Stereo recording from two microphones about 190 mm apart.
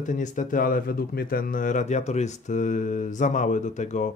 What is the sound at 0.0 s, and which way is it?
Speech, 40° left (ahead or behind).